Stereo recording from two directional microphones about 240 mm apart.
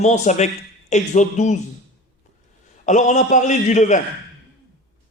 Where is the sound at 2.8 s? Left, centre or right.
Left.